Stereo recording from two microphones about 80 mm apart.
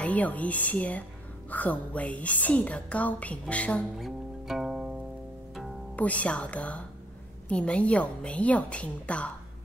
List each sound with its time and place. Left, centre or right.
0.0 s a woman's voice: centre
4.0 s music: centre
5.9 s a woman's voice: centre